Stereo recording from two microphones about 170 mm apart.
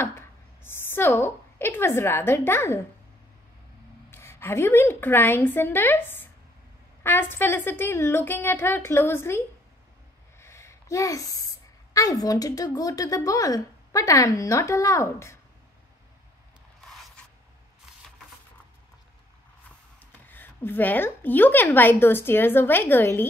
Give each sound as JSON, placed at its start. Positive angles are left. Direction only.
{"t": 0.7, "sound": "a woman's voice", "side_deg": 15}
{"t": 4.1, "sound": "a woman's voice", "side_deg": 15}
{"t": 10.4, "sound": "a sound", "side_deg": 15}
{"t": 11.9, "sound": "a woman's voice", "side_deg": 20}
{"t": 20.2, "sound": "a woman's voice", "side_deg": 10}